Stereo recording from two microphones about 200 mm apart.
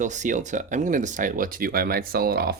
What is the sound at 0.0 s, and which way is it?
Speech, 40° right (ahead or behind).